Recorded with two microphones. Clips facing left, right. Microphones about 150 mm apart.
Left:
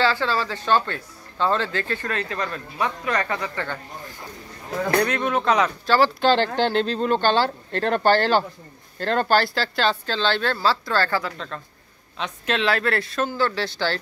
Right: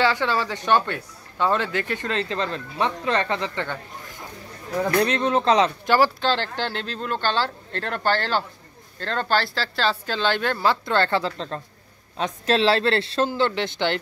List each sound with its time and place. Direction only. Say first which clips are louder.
0.0 s speech: even; 15° right (ahead or behind)
5.0 s speech: right 2 dB; 25° right (ahead or behind)
5.9 s speech: left 2 dB; 10° right (ahead or behind)
6.2 s speech: left 5 dB; 15° left (ahead or behind); by 9.9 s centre (ahead or behind)
10.0 s speech: even; 10° right (ahead or behind)